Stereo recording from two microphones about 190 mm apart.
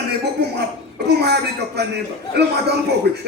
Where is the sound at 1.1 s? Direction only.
60° right (ahead or behind).